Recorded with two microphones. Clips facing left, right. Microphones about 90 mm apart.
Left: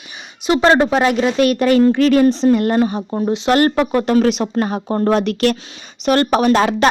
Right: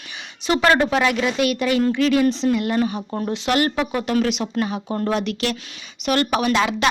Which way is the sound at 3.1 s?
20° left (ahead or behind).